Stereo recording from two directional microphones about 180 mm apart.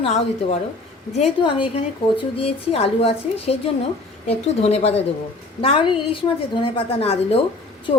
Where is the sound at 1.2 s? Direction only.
30° left (ahead or behind).